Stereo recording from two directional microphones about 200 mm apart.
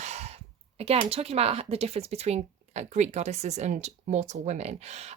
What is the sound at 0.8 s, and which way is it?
Speech, 30° right (ahead or behind).